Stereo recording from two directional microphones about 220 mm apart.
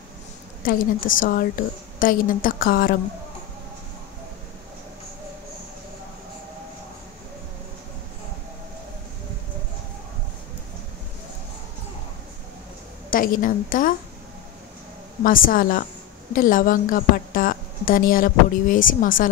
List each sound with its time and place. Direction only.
0.7 s a woman's voice: 40° left (ahead or behind)
13.1 s a woman's voice: 40° left (ahead or behind)
15.2 s a woman's voice: 40° left (ahead or behind)